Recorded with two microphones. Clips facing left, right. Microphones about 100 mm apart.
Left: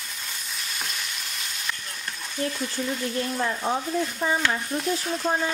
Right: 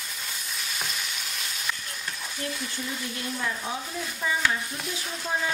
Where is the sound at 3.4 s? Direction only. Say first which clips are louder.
Left 5 dB; 35° left (ahead or behind).